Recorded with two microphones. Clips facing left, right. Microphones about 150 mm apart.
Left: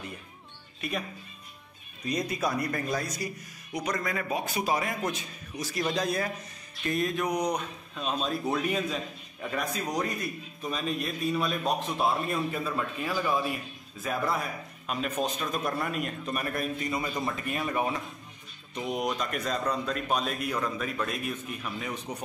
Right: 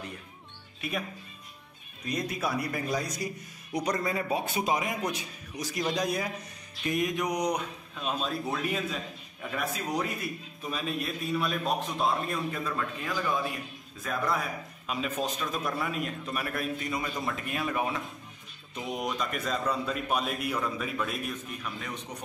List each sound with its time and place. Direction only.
0.7 s speech: centre (ahead or behind)
2.0 s a man's voice: centre (ahead or behind)
3.2 s a man's voice: 25° right (ahead or behind)
7.9 s a man's voice: centre (ahead or behind)